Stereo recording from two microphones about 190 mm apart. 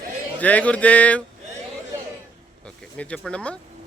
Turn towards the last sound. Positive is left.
turn(degrees=5)  # may be behind; listen again after turning